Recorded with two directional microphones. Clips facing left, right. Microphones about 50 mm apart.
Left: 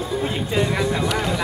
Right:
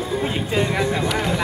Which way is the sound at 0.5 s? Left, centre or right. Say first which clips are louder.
Even; centre.